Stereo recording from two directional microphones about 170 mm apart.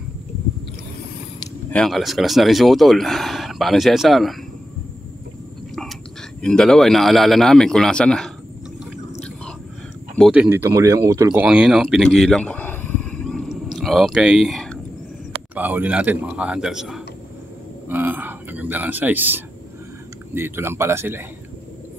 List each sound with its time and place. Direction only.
1.7 s speech: 5° left (ahead or behind)
6.4 s speech: 5° left (ahead or behind)
10.1 s a man's voice: centre (ahead or behind); by 11.4 s 15° right (ahead or behind)
11.4 s a sound: 5° right (ahead or behind)
15.5 s a man's voice: 10° right (ahead or behind)
17.8 s a sound: 10° right (ahead or behind)
20.3 s a man's voice: 15° right (ahead or behind)